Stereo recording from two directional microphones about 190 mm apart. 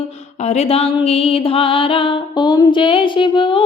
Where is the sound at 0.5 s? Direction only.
30° left (ahead or behind).